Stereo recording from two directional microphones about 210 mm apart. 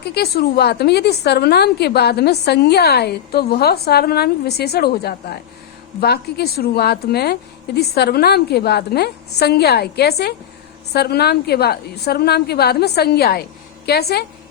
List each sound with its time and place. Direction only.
0.0 s a woman's voice: 50° left (ahead or behind)